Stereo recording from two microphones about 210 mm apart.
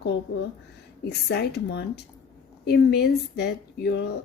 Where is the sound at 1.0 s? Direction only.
50° left (ahead or behind).